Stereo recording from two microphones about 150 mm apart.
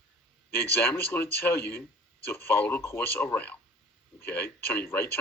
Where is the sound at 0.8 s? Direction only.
15° left (ahead or behind).